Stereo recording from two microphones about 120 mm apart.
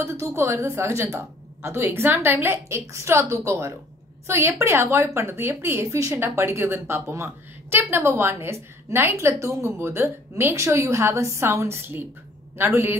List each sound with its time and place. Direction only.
0.0 s a woman's voice: 20° right (ahead or behind)